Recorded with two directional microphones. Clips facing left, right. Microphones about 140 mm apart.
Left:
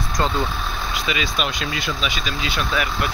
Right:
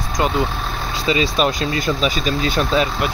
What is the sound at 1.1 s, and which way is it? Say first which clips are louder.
Speech: right 9 dB; 35° right (ahead or behind).